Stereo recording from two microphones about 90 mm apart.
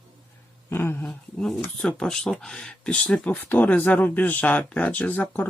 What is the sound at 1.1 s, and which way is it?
Speech, 10° left (ahead or behind).